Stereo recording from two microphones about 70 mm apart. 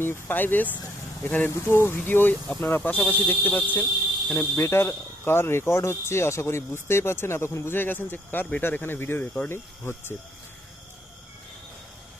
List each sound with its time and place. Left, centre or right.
0.0 s speech: left
1.5 s speech: left
4.6 s speech: left